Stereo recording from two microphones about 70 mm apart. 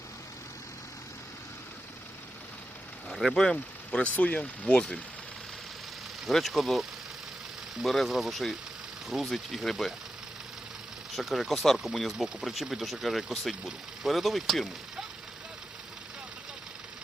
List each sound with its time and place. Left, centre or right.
3.1 s speech: centre
6.2 s speech: centre
11.1 s speech: centre